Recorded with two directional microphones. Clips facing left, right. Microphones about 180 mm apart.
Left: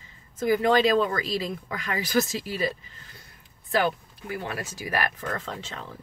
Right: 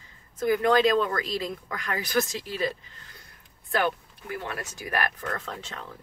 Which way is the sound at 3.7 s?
5° left (ahead or behind).